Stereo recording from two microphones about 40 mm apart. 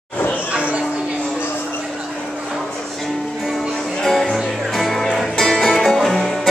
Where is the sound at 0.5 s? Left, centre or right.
Right.